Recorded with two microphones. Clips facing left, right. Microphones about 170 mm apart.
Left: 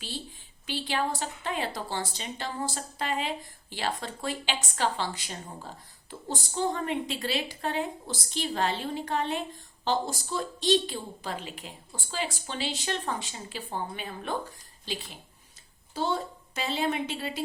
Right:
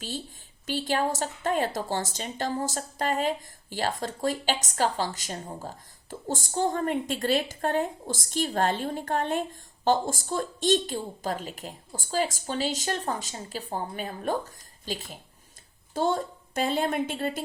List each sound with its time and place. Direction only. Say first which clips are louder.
0.7 s a woman's voice: right 3 dB; 45° right (ahead or behind)